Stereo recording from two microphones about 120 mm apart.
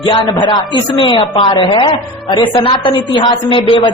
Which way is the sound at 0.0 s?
40° left (ahead or behind).